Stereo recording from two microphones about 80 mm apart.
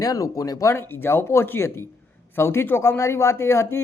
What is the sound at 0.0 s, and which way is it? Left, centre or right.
Speech, left.